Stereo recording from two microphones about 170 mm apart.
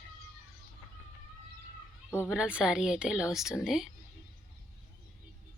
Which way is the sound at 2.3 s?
5° right (ahead or behind).